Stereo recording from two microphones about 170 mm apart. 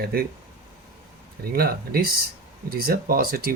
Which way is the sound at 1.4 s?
65° right (ahead or behind).